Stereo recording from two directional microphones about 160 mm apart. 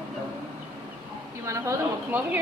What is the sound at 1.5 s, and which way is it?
Speech, 20° right (ahead or behind).